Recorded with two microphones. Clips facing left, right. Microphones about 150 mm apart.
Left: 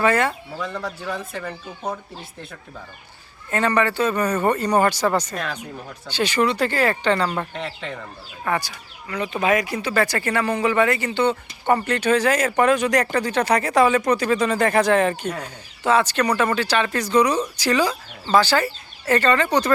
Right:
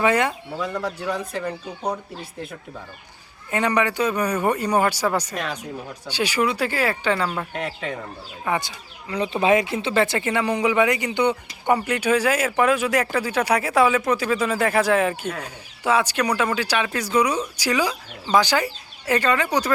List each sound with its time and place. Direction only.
0.0 s speech: 15° right (ahead or behind)
0.6 s speech: 5° right (ahead or behind)
3.5 s speech: 15° right (ahead or behind)
8.4 s speech: 20° right (ahead or behind)